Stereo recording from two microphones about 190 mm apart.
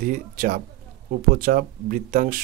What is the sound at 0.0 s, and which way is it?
Speech, 50° right (ahead or behind).